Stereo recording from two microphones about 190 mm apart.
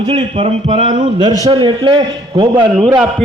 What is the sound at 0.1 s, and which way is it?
A man's voice, 30° right (ahead or behind).